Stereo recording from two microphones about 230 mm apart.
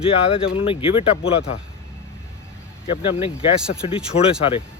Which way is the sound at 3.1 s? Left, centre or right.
Left.